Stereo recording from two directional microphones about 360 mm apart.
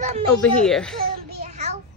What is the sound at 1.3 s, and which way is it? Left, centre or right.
Child singing, centre.